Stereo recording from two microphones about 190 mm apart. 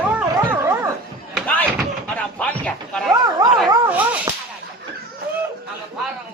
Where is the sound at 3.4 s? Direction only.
20° right (ahead or behind).